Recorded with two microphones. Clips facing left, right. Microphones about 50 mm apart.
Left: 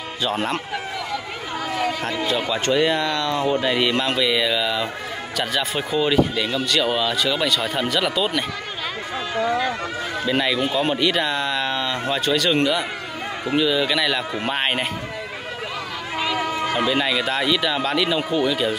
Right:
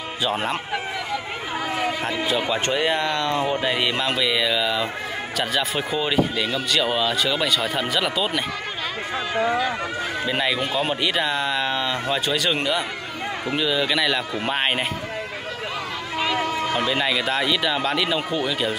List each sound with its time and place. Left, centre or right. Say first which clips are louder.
0.2 s speech: left 1 dB; centre
1.8 s speech: left 2 dB; centre
3.6 s speech: left 2 dB; centre
9.3 s speech: even; right
10.2 s speech: left 3 dB; centre
16.3 s speech: left 1 dB; centre